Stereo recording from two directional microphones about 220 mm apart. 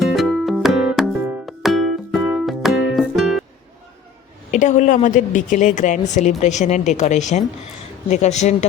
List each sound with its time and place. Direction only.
0.0 s music: centre (ahead or behind)
4.5 s speech: 35° left (ahead or behind)